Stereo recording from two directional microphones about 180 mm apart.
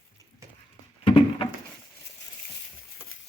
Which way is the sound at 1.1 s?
30° left (ahead or behind).